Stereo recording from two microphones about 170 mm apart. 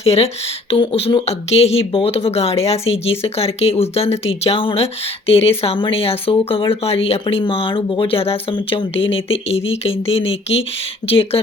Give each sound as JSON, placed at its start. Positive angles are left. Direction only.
{"t": 0.0, "sound": "speech", "side_deg": 35}